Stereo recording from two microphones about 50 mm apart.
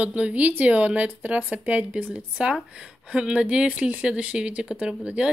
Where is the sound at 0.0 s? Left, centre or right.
Right.